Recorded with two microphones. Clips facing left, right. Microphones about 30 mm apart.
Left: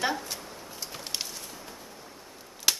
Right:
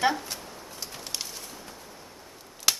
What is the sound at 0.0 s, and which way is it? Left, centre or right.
Speech, centre.